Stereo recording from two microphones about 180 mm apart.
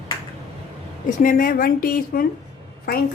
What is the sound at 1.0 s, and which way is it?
A woman's voice, 50° left (ahead or behind).